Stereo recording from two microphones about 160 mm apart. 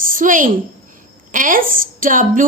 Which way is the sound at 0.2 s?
55° right (ahead or behind).